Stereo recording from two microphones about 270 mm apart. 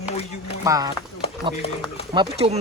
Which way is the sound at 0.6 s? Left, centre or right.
Centre.